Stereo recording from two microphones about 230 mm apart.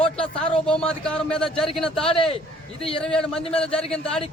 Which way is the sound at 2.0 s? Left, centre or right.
Left.